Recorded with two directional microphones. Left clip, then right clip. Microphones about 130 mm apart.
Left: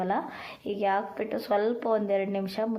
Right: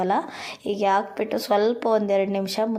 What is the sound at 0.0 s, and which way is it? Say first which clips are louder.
Speech: right 6 dB; 40° right (ahead or behind).